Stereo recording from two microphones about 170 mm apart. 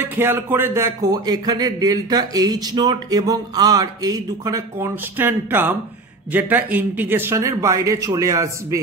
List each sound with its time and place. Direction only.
0.0 s speech: 10° right (ahead or behind)